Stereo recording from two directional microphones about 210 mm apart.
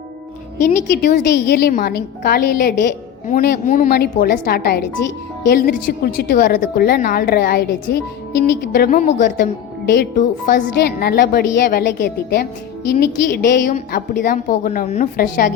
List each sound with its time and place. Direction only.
0.7 s a woman's voice: 35° left (ahead or behind)
1.2 s a woman's voice: 50° left (ahead or behind)